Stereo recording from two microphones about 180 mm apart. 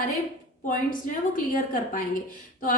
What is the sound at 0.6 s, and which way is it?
A woman's voice, 50° left (ahead or behind).